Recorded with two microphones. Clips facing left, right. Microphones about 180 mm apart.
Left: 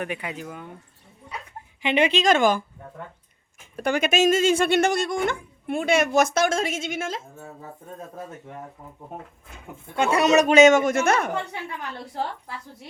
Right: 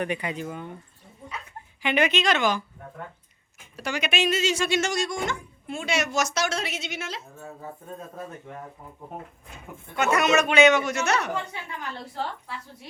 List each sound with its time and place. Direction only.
0.0 s speech: 5° left (ahead or behind)
1.8 s speech: 25° left (ahead or behind)
2.2 s a woman's voice: 50° left (ahead or behind)
3.8 s a woman's voice: 55° left (ahead or behind)
9.9 s speech: 30° left (ahead or behind); by 11.3 s 50° left (ahead or behind)